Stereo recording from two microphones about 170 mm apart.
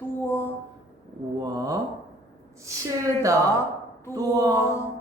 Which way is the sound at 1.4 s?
20° right (ahead or behind).